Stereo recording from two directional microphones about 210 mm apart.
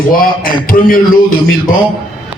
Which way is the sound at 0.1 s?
45° left (ahead or behind).